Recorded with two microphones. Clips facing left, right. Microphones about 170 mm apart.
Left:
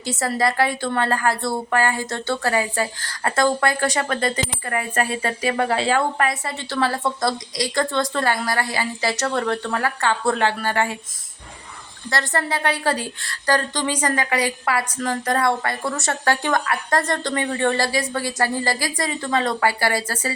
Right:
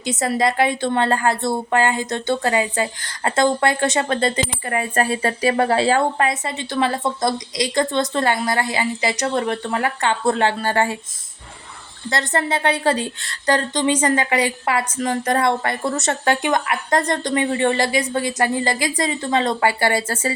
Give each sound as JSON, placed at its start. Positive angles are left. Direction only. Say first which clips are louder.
{"t": 0.0, "sound": "a woman's voice", "louder": "right 2 dB", "side_deg": -20}
{"t": 12.1, "sound": "a woman's voice", "louder": "right 2 dB", "side_deg": -20}